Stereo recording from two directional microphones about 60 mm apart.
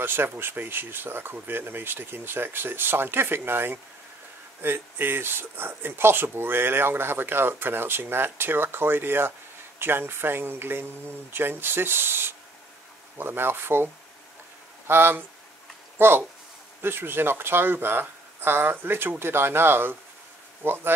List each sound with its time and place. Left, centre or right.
0.0 s speech: right
14.9 s speech: right